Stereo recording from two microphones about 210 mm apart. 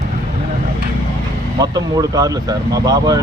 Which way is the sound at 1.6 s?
15° right (ahead or behind).